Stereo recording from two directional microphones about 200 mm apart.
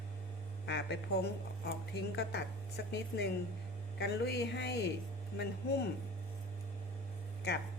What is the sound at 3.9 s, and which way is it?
Speech, 55° left (ahead or behind).